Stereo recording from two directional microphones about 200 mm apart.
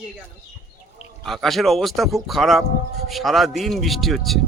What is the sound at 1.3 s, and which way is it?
Speech, centre (ahead or behind).